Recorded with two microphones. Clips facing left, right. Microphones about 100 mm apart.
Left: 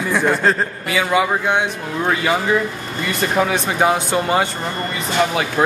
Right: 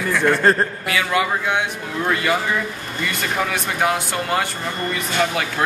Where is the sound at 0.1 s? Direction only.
15° left (ahead or behind).